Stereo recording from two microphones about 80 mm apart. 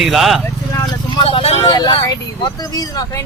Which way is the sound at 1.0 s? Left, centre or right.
Left.